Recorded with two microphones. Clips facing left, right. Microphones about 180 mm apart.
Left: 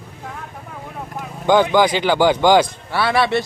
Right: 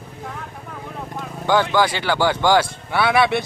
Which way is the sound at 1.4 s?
15° left (ahead or behind).